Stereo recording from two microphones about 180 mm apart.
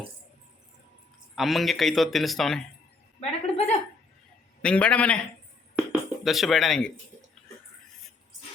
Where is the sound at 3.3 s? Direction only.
35° left (ahead or behind).